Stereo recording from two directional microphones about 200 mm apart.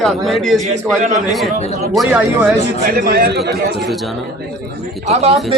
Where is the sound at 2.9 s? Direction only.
50° right (ahead or behind).